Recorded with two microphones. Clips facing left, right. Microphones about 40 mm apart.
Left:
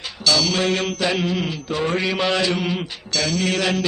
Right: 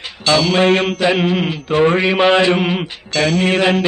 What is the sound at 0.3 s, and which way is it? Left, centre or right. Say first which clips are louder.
A woman's voice: right 6 dB; right.